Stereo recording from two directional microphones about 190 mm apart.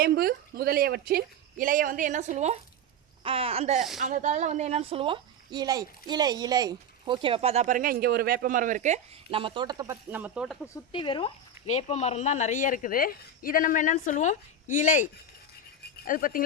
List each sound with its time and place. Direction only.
0.0 s a woman's voice: 55° right (ahead or behind); by 10.7 s centre (ahead or behind)
10.9 s speech: 25° left (ahead or behind); by 16.4 s 45° left (ahead or behind)